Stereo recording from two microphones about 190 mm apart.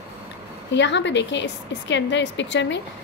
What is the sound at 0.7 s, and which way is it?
A woman's voice, 70° left (ahead or behind).